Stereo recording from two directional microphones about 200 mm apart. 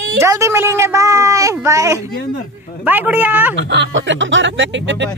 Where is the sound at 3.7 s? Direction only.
65° right (ahead or behind).